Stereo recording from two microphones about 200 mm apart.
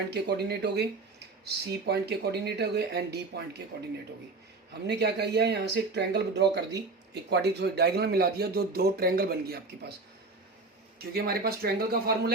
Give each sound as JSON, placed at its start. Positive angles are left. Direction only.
{"t": 0.1, "sound": "speech", "side_deg": -55}
{"t": 11.1, "sound": "speech", "side_deg": -50}